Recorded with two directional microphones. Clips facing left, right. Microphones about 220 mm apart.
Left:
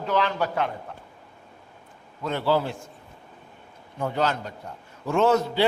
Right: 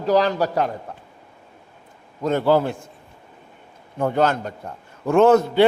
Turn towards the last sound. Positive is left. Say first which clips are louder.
# right 7 dB
turn(degrees=-55)  # may be behind; listen again after turning